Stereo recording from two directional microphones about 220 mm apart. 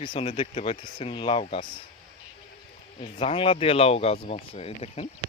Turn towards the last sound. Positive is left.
turn(degrees=25)  # may be behind; listen again after turning